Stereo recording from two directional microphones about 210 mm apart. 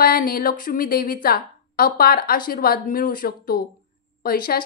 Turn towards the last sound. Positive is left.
turn(degrees=45)  # may be behind; listen again after turning